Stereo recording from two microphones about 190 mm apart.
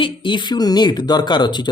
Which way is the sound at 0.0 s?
25° left (ahead or behind).